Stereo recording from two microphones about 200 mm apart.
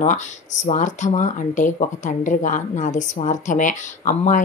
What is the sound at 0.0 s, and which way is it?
Speech, 40° left (ahead or behind).